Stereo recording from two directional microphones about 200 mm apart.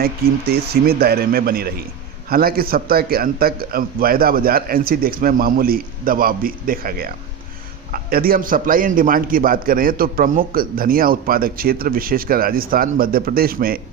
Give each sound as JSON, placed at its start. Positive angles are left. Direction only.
{"t": 0.0, "sound": "a man's voice", "side_deg": -55}